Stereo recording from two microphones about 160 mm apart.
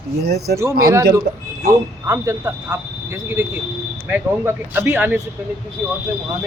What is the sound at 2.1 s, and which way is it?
Speech, 15° right (ahead or behind).